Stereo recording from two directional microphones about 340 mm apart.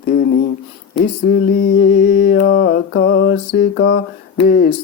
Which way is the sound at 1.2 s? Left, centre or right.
Left.